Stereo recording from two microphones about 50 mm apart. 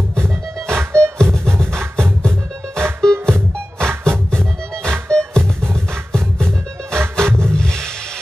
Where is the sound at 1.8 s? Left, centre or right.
Right.